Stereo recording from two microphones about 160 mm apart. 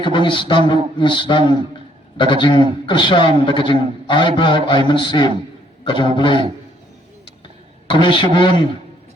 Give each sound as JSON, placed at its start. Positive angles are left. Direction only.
{"t": 0.0, "sound": "a man's voice", "side_deg": 30}
{"t": 7.9, "sound": "a man's voice", "side_deg": 30}